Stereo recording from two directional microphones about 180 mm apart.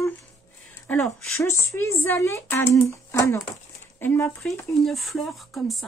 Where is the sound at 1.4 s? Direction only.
15° left (ahead or behind).